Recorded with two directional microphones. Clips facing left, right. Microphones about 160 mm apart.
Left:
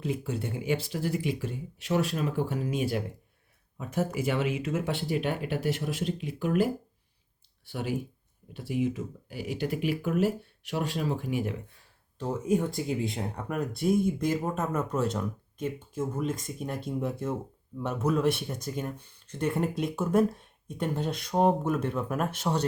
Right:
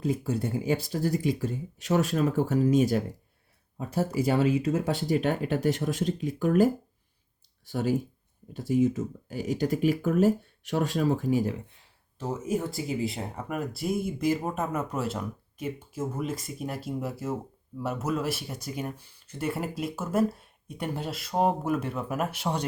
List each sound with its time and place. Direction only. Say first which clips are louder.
0.0 s speech: right 4 dB; 40° right (ahead or behind)
12.2 s speech: left 2 dB; 5° right (ahead or behind)